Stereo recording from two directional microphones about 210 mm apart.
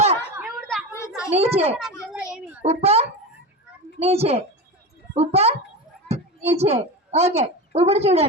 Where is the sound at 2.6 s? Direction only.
30° right (ahead or behind).